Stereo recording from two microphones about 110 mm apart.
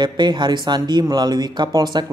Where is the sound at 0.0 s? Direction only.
40° right (ahead or behind).